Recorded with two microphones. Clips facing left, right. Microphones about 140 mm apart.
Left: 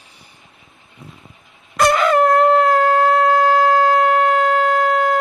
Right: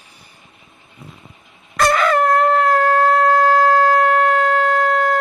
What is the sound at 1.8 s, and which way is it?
Shofar, 20° left (ahead or behind).